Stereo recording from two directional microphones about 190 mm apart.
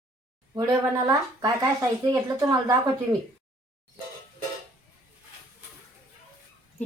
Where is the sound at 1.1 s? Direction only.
20° right (ahead or behind).